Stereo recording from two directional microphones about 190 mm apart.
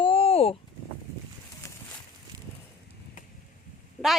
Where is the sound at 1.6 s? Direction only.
15° left (ahead or behind).